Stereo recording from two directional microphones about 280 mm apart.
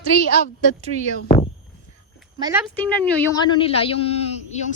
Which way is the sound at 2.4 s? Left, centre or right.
Centre.